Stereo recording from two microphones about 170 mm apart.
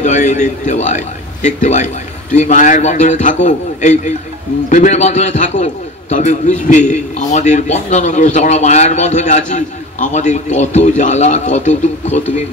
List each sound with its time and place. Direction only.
0.0 s a man's voice: 45° left (ahead or behind)